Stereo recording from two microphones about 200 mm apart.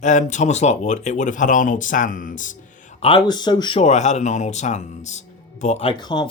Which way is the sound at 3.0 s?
25° left (ahead or behind).